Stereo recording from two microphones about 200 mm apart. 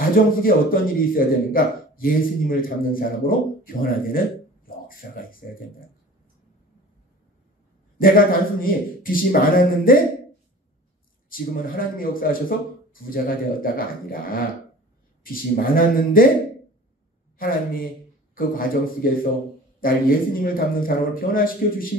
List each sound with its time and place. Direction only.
0.1 s a man's voice: 45° left (ahead or behind)
8.0 s a man's voice: 45° left (ahead or behind)
11.2 s a man's voice: 45° left (ahead or behind)
17.4 s a man's voice: 45° left (ahead or behind)